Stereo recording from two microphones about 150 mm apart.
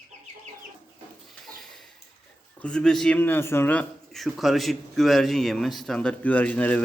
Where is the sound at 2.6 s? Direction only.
5° left (ahead or behind).